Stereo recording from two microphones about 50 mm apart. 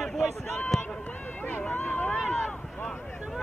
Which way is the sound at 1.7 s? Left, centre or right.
Left.